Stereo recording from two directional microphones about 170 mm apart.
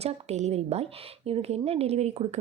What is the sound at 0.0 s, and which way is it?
Speech, 40° right (ahead or behind).